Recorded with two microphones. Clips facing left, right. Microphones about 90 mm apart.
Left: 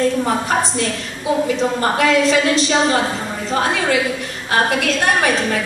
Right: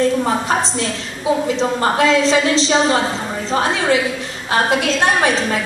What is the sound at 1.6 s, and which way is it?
A woman's voice, 25° right (ahead or behind).